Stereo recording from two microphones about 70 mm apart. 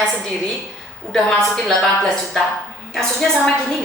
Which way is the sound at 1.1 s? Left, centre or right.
Centre.